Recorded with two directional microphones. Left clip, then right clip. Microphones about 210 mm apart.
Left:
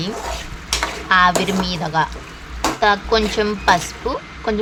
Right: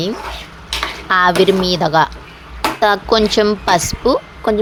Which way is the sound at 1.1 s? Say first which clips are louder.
Right 3 dB; 40° right (ahead or behind).